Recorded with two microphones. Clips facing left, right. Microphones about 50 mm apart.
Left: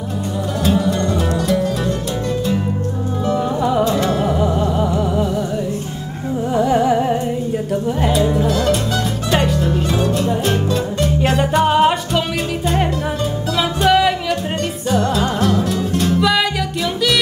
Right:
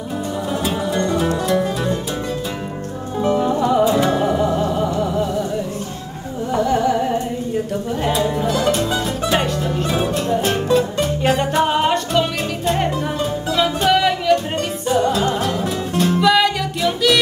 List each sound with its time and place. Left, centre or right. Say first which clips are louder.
0.7 s music: left 4 dB; centre
3.4 s music: right 1 dB; centre
6.6 s music: left 2 dB; centre
8.0 s music: left 2 dB; centre
15.5 s music: left 3 dB; centre
16.0 s music: right 3 dB; centre